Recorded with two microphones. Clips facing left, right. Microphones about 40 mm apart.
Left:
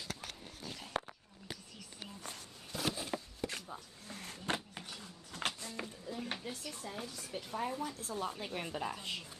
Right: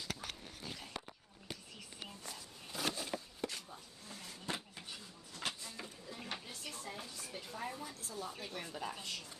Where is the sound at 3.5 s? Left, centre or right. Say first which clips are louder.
Left 4 dB; left.